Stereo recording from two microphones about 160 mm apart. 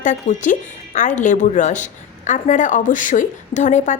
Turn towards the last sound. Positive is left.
turn(degrees=50)  # may be behind; listen again after turning